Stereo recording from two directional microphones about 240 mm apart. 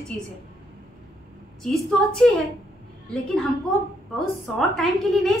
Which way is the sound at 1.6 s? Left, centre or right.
Centre.